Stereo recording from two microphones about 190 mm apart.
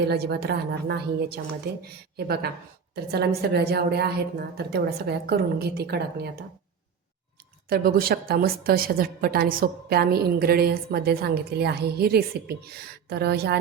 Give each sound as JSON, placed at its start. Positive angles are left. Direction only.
{"t": 0.1, "sound": "a woman's voice", "side_deg": -60}
{"t": 7.7, "sound": "a woman's voice", "side_deg": -50}